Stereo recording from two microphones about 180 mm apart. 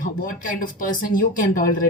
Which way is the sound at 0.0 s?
50° left (ahead or behind).